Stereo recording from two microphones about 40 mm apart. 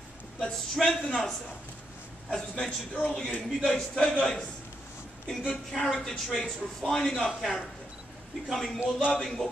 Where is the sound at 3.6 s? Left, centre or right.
Centre.